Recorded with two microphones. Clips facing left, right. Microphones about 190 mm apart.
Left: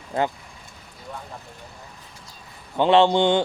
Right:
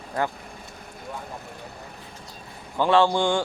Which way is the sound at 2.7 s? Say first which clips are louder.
Left 3 dB; 20° left (ahead or behind).